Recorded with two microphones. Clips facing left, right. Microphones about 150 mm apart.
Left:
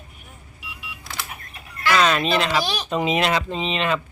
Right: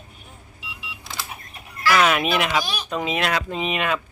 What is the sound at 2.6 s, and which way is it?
Speech, 30° left (ahead or behind).